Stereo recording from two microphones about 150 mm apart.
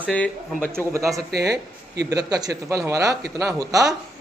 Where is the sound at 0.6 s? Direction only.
15° right (ahead or behind).